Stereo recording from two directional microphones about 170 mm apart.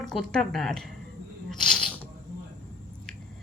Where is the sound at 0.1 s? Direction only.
Centre (ahead or behind).